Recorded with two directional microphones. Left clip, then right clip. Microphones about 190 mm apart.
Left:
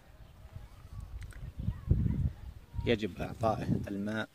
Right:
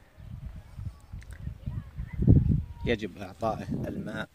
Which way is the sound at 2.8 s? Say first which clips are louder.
Even; 15° right (ahead or behind).